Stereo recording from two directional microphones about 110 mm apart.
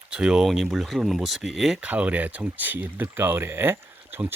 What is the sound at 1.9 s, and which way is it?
Speech, 15° right (ahead or behind).